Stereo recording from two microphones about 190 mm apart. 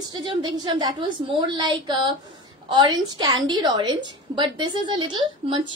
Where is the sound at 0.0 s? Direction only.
20° right (ahead or behind).